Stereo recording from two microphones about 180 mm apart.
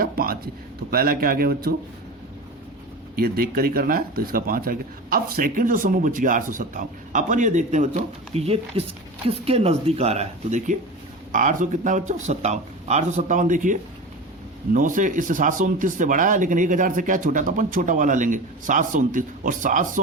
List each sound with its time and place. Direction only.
0.0 s a man's voice: 55° right (ahead or behind)
3.2 s speech: 55° right (ahead or behind)